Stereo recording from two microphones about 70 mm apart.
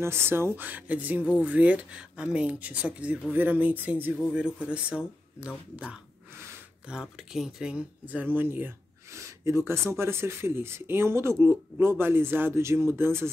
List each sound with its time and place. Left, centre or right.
0.0 s speech: right; by 5.5 s centre
6.3 s a sound: right
6.9 s speech: centre
8.1 s speech: right
9.1 s speech: right